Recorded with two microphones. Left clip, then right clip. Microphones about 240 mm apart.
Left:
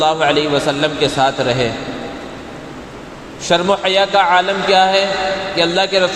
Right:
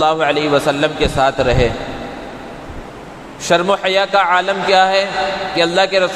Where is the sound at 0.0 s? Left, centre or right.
Right.